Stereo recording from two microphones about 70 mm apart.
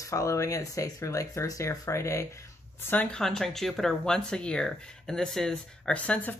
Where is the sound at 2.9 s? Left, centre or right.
Centre.